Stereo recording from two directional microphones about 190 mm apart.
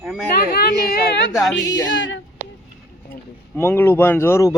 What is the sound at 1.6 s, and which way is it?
Speech, 20° left (ahead or behind).